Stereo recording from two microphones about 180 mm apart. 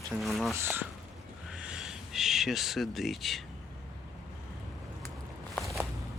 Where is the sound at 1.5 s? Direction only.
5° right (ahead or behind).